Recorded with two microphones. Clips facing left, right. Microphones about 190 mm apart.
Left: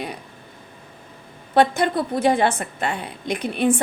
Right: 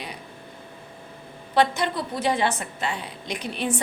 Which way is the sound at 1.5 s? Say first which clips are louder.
Left 4 dB; 50° left (ahead or behind).